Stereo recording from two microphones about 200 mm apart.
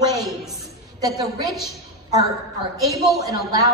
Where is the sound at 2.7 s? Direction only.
20° right (ahead or behind).